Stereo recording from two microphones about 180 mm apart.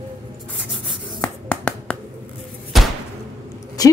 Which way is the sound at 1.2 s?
10° left (ahead or behind).